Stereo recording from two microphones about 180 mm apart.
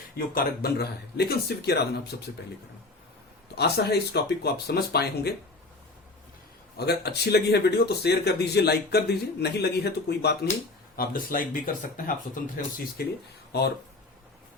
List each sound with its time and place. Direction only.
0.3 s speech: 60° left (ahead or behind)
3.5 s speech: 65° left (ahead or behind)
6.7 s speech: 65° left (ahead or behind)
10.9 s speech: 55° left (ahead or behind)
13.5 s speech: 65° left (ahead or behind)